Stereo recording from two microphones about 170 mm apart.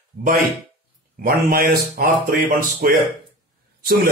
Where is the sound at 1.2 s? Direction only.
60° right (ahead or behind).